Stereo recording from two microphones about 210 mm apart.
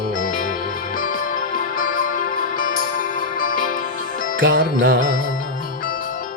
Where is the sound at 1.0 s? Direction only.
40° left (ahead or behind).